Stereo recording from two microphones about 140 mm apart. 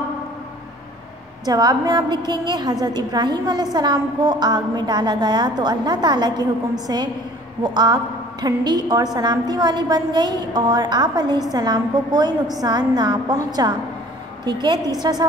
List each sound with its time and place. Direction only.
1.4 s a woman's voice: 30° right (ahead or behind)